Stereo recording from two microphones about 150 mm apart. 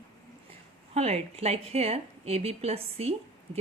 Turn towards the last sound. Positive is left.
turn(degrees=-45)  # may be behind; listen again after turning